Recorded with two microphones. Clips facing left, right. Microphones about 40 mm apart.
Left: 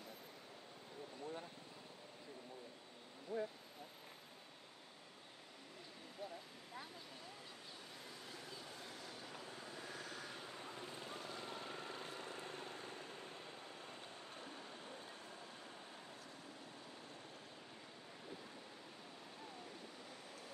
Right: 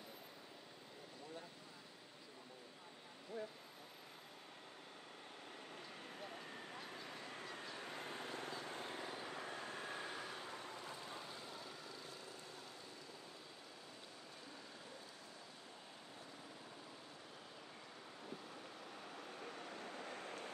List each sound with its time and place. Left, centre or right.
3.3 s a sound: right
6.9 s vehicle: right
9.3 s vehicle: right
9.9 s vehicle: right
11.2 s vehicle: left
19.4 s vehicle: right